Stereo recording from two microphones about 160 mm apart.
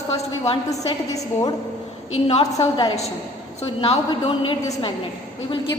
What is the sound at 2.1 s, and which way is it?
A woman's voice, 40° left (ahead or behind).